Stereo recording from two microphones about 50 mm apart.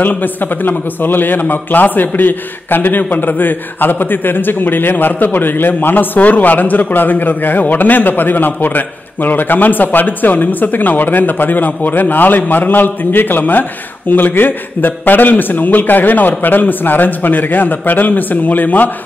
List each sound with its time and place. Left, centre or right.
0.0 s a man's voice: left